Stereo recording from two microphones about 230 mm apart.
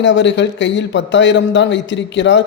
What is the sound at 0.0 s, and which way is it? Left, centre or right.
Speech, left.